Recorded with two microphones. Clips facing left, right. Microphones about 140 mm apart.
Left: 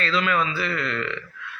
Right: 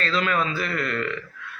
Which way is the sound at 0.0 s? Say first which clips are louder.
Left 1 dB; 40° right (ahead or behind).